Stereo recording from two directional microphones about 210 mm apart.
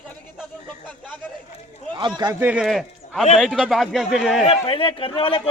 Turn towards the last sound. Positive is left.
turn(degrees=25)  # may be behind; listen again after turning